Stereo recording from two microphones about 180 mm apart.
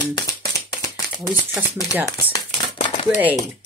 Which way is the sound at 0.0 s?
20° left (ahead or behind).